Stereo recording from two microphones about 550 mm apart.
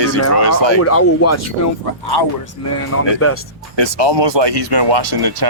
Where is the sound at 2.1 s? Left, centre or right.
Left.